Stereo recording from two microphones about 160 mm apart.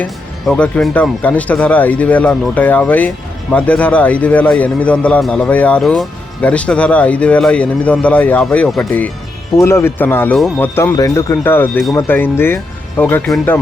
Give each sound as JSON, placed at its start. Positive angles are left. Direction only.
{"t": 0.0, "sound": "a man's voice", "side_deg": 5}
{"t": 9.6, "sound": "a man's voice", "side_deg": 15}